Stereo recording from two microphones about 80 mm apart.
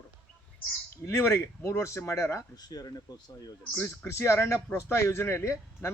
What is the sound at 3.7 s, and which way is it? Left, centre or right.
Speech, left.